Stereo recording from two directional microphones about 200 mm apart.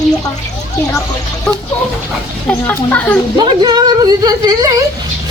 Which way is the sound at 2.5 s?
5° left (ahead or behind).